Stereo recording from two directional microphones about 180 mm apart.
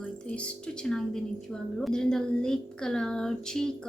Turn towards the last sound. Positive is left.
turn(degrees=5)  # may be behind; listen again after turning